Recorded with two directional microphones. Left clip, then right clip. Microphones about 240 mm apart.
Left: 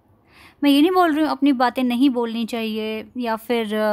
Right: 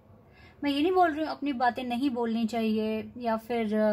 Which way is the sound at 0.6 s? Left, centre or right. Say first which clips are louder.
Left 8 dB; left.